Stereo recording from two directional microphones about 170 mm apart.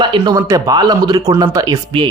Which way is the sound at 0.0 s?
30° right (ahead or behind).